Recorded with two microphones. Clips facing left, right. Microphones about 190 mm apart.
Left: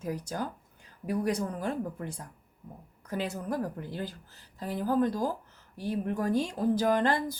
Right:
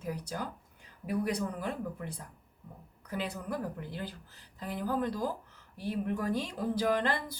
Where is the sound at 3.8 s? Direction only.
45° left (ahead or behind).